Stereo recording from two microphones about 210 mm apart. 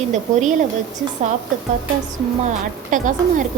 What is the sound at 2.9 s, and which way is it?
Speech, 40° right (ahead or behind).